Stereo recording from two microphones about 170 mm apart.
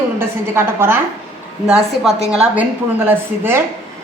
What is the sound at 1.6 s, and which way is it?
A woman's voice, 5° right (ahead or behind).